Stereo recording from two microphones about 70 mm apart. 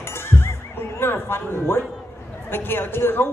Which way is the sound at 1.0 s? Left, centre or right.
Left.